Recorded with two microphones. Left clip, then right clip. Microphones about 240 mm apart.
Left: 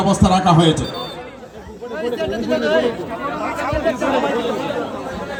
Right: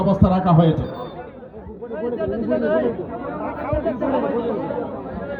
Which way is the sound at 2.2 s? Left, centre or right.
Centre.